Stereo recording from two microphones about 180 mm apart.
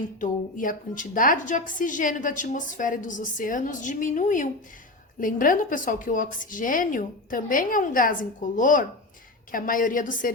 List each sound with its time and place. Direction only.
0.2 s a woman's voice: 50° left (ahead or behind)